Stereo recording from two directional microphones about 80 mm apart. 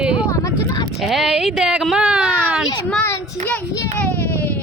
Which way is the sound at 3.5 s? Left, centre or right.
Centre.